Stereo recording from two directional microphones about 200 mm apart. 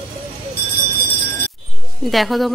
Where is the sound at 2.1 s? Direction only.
Centre (ahead or behind).